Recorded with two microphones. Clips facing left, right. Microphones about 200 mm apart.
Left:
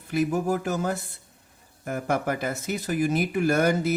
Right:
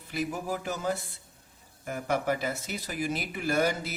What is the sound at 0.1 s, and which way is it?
Speech, 50° left (ahead or behind).